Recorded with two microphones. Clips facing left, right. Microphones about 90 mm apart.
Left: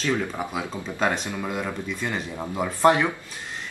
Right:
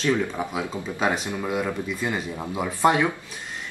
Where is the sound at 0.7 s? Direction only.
5° right (ahead or behind).